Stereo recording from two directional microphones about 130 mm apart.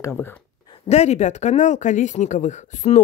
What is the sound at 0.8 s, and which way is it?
Speech, 55° left (ahead or behind).